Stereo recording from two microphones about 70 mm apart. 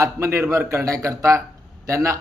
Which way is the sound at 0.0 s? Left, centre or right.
Right.